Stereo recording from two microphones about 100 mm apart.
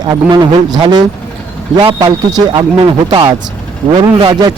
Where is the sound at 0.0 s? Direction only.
45° right (ahead or behind).